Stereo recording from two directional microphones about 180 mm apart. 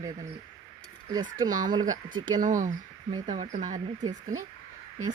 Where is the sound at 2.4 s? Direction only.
45° right (ahead or behind).